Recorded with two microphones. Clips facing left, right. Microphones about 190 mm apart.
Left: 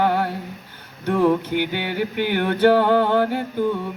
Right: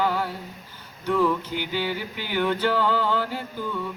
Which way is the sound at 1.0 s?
55° left (ahead or behind).